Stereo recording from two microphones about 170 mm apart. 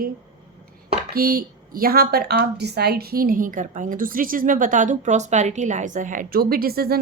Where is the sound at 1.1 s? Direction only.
60° right (ahead or behind).